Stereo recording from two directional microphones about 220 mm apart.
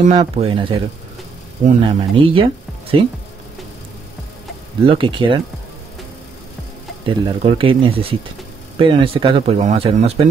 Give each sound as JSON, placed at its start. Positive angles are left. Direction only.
{"t": 0.0, "sound": "speech", "side_deg": -25}
{"t": 4.8, "sound": "speech", "side_deg": -20}
{"t": 7.1, "sound": "speech", "side_deg": -25}